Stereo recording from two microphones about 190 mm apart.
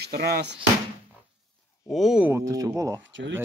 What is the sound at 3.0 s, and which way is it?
Speech, 75° right (ahead or behind).